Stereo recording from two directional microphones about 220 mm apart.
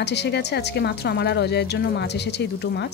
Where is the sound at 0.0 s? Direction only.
50° left (ahead or behind).